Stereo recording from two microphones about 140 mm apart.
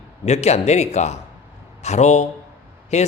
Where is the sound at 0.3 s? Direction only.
50° left (ahead or behind).